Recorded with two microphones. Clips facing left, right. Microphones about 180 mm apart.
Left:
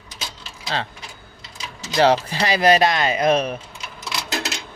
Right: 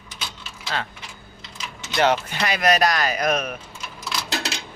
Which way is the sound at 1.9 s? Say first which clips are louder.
Left 4 dB; 35° left (ahead or behind).